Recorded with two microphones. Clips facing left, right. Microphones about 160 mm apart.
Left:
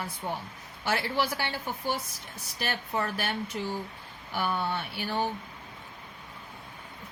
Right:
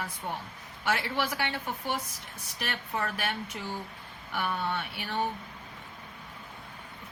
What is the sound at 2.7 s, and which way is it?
Speech, 35° left (ahead or behind).